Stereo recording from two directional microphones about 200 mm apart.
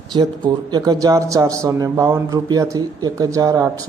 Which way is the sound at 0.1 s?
25° right (ahead or behind).